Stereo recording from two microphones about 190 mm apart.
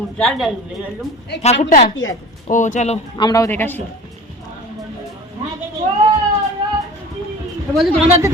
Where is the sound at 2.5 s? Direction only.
40° left (ahead or behind).